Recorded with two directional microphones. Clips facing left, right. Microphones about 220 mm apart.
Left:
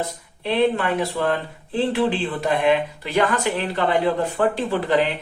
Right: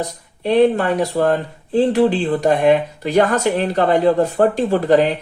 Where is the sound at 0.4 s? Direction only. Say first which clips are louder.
Right 6 dB; 45° right (ahead or behind).